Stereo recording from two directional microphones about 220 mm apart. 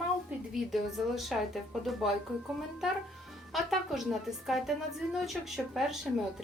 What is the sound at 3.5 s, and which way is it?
A woman's voice, centre (ahead or behind).